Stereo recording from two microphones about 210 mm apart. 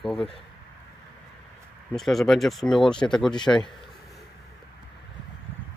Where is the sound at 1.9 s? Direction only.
Centre (ahead or behind).